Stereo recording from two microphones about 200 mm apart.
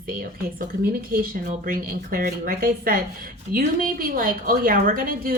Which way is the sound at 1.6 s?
45° right (ahead or behind).